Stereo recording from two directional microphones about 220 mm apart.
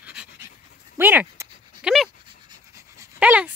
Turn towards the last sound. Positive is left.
turn(degrees=-5)  # may be behind; listen again after turning